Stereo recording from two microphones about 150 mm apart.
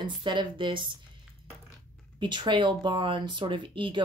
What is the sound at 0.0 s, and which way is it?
Speech, 30° right (ahead or behind).